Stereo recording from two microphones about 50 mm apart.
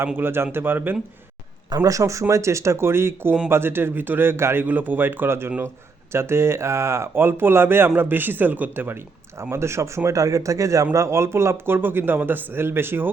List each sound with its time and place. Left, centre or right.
0.2 s speech: right
1.9 s speech: right
4.6 s speech: right
5.5 s speech: right
9.4 s speech: right
10.9 s speech: right